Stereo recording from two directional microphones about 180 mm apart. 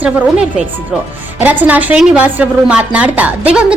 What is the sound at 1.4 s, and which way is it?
A woman's voice, 10° right (ahead or behind).